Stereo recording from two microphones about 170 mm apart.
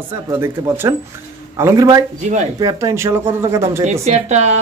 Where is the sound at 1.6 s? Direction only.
20° right (ahead or behind).